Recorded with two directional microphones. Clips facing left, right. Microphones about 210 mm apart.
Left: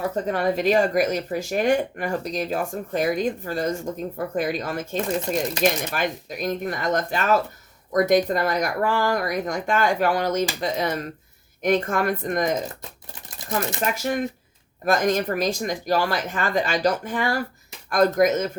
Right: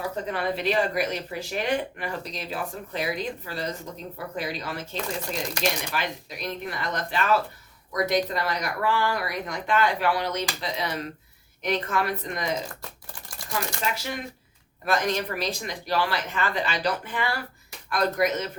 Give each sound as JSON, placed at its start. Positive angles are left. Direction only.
{"t": 0.3, "sound": "speech", "side_deg": 45}
{"t": 13.8, "sound": "speech", "side_deg": 50}